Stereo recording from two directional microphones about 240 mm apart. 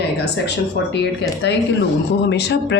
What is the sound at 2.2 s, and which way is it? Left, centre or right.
Speech, left.